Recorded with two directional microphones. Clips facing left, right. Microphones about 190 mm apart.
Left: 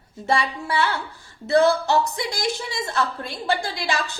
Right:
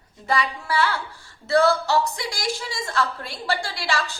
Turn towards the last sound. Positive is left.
turn(degrees=20)  # may be behind; listen again after turning